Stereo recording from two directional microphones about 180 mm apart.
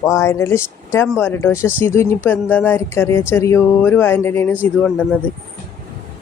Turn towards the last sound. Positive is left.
turn(degrees=5)  # may be behind; listen again after turning